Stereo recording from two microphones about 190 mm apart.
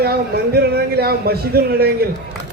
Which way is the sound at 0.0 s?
55° right (ahead or behind).